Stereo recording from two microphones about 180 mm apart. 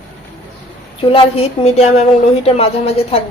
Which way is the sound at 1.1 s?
35° left (ahead or behind).